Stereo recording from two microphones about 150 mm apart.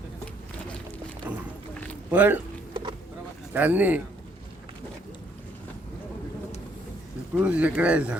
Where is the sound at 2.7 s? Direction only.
30° right (ahead or behind).